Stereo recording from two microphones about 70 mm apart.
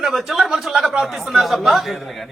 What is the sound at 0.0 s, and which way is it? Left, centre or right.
A man's voice, centre.